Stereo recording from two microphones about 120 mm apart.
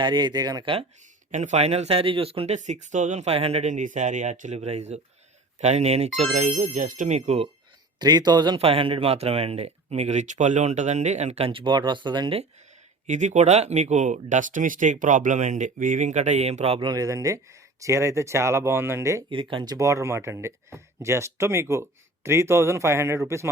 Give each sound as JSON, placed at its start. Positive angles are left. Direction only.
{"t": 0.0, "sound": "speech", "side_deg": -40}
{"t": 1.3, "sound": "speech", "side_deg": -80}
{"t": 2.6, "sound": "speech", "side_deg": -90}
{"t": 7.9, "sound": "speech", "side_deg": -35}
{"t": 8.5, "sound": "speech", "side_deg": -50}
{"t": 13.1, "sound": "speech", "side_deg": -85}
{"t": 16.8, "sound": "speech", "side_deg": -30}
{"t": 19.3, "sound": "speech", "side_deg": -45}
{"t": 19.7, "sound": "speech", "side_deg": -25}